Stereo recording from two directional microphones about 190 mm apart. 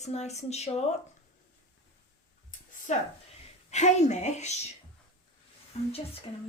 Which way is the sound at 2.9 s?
40° left (ahead or behind).